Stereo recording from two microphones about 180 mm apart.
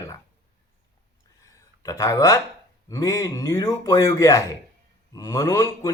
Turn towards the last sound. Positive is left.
turn(degrees=20)  # may be behind; listen again after turning